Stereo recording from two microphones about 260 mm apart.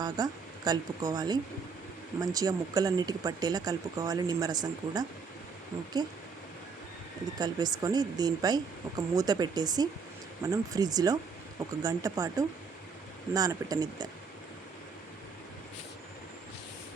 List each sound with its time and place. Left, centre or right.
0.0 s speech: centre
7.3 s speech: centre